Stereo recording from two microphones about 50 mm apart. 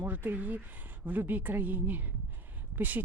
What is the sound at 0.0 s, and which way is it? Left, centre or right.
Speech, right.